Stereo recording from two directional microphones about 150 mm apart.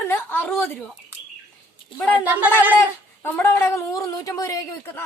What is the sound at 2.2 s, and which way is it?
Speech, 10° right (ahead or behind).